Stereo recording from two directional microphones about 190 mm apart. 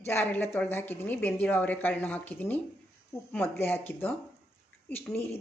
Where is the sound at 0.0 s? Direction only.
10° left (ahead or behind).